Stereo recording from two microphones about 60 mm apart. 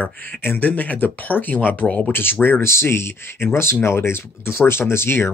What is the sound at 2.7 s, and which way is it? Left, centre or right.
Speech, left.